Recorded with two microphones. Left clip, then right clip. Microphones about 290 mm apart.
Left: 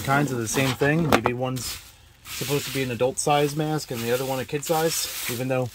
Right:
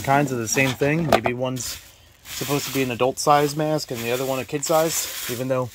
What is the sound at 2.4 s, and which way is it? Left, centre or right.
Speech, right.